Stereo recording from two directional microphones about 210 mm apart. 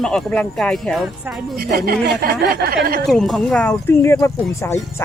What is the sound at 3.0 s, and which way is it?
Speech, centre (ahead or behind).